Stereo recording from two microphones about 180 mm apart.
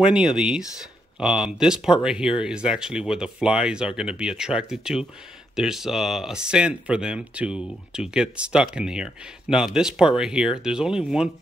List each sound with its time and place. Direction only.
0.0 s speech: 5° right (ahead or behind)